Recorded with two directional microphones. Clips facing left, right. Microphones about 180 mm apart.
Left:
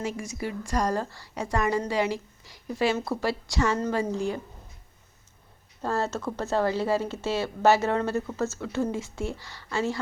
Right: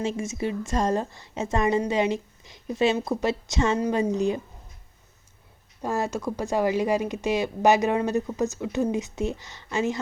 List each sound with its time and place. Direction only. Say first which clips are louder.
0.0 s a woman's voice: right 4 dB; 25° right (ahead or behind)
5.8 s speech: right 1 dB; 15° right (ahead or behind)